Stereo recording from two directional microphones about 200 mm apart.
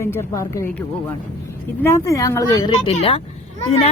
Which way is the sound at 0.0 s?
15° left (ahead or behind).